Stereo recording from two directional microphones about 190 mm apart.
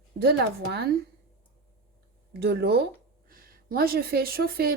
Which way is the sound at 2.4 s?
55° right (ahead or behind).